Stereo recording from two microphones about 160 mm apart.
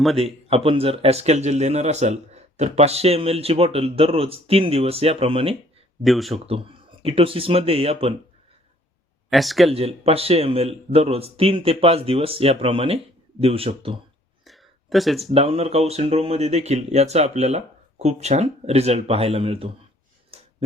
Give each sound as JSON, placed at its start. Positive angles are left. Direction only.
{"t": 0.4, "sound": "speech", "side_deg": -35}
{"t": 6.0, "sound": "speech", "side_deg": 0}
{"t": 6.3, "sound": "speech", "side_deg": -35}
{"t": 9.3, "sound": "speech", "side_deg": 0}
{"t": 9.7, "sound": "speech", "side_deg": -40}
{"t": 14.4, "sound": "a sound", "side_deg": 0}
{"t": 15.3, "sound": "speech", "side_deg": -40}
{"t": 20.3, "sound": "a sound", "side_deg": -35}